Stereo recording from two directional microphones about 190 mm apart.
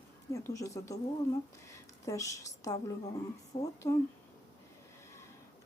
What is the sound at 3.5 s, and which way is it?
Speech, 25° left (ahead or behind).